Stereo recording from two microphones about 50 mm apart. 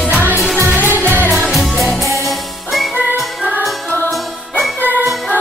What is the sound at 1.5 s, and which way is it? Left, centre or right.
Music, centre.